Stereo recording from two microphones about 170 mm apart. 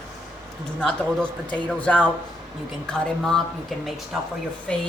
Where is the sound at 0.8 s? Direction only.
5° left (ahead or behind).